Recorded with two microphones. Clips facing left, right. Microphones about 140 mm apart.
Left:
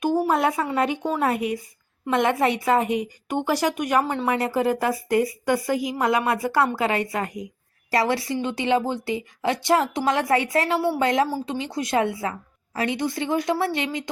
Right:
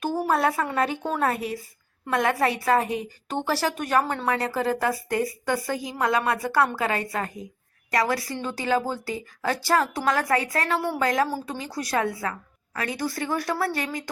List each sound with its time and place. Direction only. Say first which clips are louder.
0.0 s a sound: left 2 dB; 20° left (ahead or behind)
0.8 s a woman's voice: left 2 dB; 15° left (ahead or behind)
4.0 s a woman's voice: left 3 dB; 5° left (ahead or behind)
4.3 s a woman's voice: left 3 dB; 20° left (ahead or behind)
10.8 s a woman's voice: left 4 dB; 10° left (ahead or behind)
11.0 s a woman's voice: left 2 dB; 25° left (ahead or behind)